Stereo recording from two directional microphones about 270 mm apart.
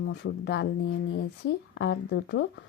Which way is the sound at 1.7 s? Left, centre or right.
Left.